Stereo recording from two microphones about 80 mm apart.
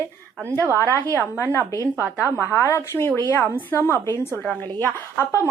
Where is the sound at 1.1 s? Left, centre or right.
Left.